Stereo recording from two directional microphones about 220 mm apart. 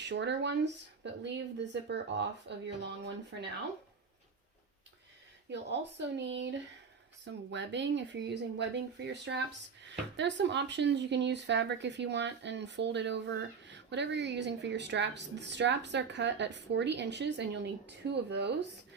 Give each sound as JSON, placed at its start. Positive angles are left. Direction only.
{"t": 0.0, "sound": "speech", "side_deg": -55}
{"t": 5.5, "sound": "speech", "side_deg": -50}